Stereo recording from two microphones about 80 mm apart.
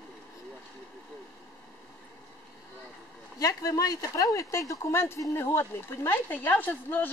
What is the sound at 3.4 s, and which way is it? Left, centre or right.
A woman's voice, left.